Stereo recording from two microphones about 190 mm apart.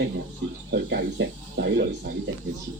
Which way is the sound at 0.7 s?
65° right (ahead or behind).